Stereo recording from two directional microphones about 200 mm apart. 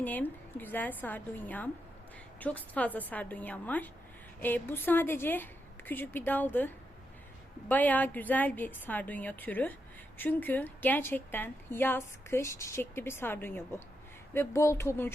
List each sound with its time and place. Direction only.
0.0 s a woman's voice: 10° left (ahead or behind)
7.7 s a woman's voice: 10° left (ahead or behind)